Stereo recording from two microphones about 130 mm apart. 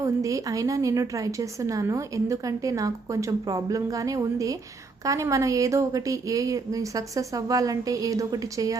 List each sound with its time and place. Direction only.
0.0 s a woman's voice: 25° right (ahead or behind)